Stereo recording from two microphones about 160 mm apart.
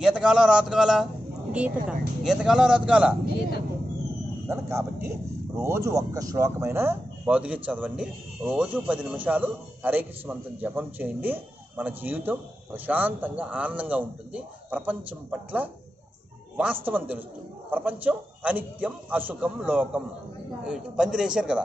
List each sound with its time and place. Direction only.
0.0 s a man's voice: 5° right (ahead or behind)
4.5 s speech: 20° right (ahead or behind)
16.8 s a man's voice: 10° right (ahead or behind)